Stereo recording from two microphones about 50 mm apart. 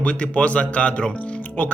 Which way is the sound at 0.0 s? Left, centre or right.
Left.